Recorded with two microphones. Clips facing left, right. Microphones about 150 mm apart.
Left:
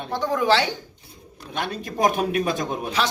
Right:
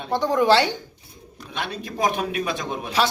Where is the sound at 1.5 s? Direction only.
50° left (ahead or behind).